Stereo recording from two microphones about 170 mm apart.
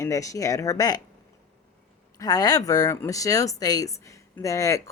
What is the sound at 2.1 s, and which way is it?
Speech, 20° left (ahead or behind).